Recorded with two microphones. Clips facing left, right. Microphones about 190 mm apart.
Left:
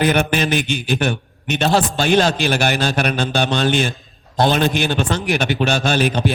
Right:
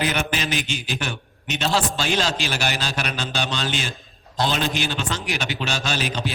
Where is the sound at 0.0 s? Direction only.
55° left (ahead or behind).